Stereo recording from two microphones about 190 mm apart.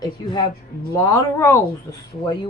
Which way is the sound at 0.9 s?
15° left (ahead or behind).